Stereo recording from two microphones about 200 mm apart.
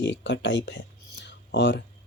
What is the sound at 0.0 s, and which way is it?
A man's voice, 60° left (ahead or behind).